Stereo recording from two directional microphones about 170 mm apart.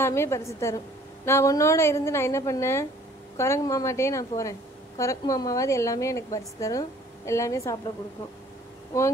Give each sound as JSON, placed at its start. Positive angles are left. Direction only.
{"t": 0.0, "sound": "a woman's voice", "side_deg": 15}
{"t": 8.9, "sound": "a woman's voice", "side_deg": 15}